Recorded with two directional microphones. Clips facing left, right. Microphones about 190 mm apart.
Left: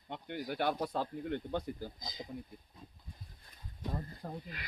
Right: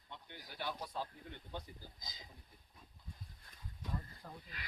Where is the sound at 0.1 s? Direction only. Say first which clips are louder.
Left 14 dB; 70° left (ahead or behind).